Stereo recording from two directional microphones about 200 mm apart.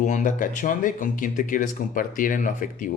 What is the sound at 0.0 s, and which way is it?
Speech, 40° left (ahead or behind).